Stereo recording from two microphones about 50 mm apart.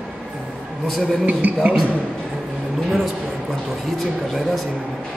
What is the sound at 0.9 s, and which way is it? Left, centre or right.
Speech, centre.